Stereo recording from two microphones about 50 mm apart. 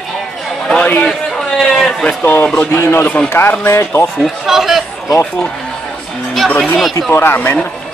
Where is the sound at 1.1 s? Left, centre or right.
Centre.